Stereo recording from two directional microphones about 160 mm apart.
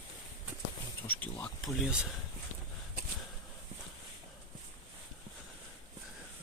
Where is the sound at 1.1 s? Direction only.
10° left (ahead or behind).